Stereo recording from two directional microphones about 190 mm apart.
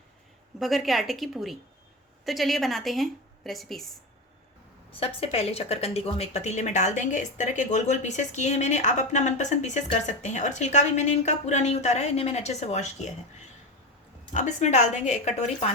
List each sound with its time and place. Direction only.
0.6 s speech: centre (ahead or behind)
4.9 s a woman's voice: 30° left (ahead or behind)
14.3 s a woman's voice: 40° left (ahead or behind)